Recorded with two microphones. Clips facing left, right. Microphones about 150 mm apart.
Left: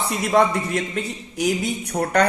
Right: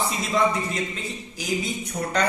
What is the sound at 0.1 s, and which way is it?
Speech, 65° left (ahead or behind).